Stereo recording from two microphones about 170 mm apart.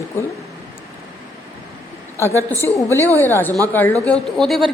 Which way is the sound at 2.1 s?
15° left (ahead or behind).